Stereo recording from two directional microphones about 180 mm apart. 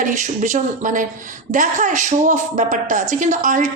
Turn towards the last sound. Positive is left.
turn(degrees=-45)  # may be behind; listen again after turning